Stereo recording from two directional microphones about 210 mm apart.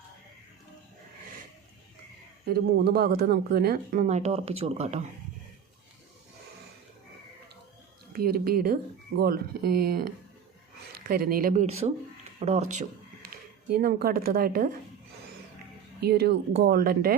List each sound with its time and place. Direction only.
2.4 s a woman's voice: 50° right (ahead or behind); by 5.0 s 30° right (ahead or behind)
8.1 s speech: 45° right (ahead or behind)
11.1 s a woman's voice: 45° right (ahead or behind)
13.3 s speech: 45° right (ahead or behind)
16.0 s speech: 50° right (ahead or behind)